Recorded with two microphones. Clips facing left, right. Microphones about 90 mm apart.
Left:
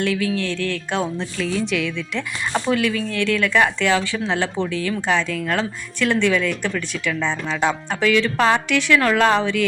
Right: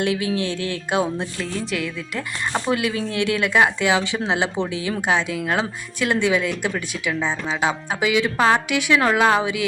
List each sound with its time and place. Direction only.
0.0 s speech: 20° right (ahead or behind)